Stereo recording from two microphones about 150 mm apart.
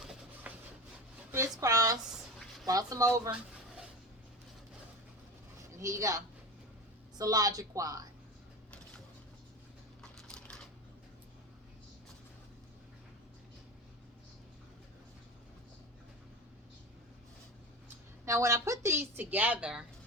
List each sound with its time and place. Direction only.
0.4 s a sound: 10° right (ahead or behind)
1.6 s a sound: 25° right (ahead or behind)
2.6 s a woman's voice: 25° right (ahead or behind)
5.6 s a woman's voice: 20° right (ahead or behind)
10.0 s typing: 5° left (ahead or behind)
18.3 s a woman's voice: 20° right (ahead or behind)